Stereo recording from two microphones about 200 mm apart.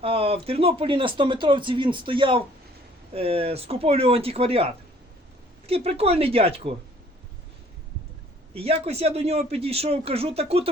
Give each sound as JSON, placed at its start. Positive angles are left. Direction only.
{"t": 0.0, "sound": "speech", "side_deg": -30}
{"t": 8.5, "sound": "speech", "side_deg": -30}